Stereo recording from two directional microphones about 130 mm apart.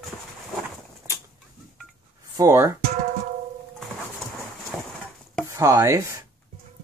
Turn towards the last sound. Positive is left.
turn(degrees=-25)  # may be behind; listen again after turning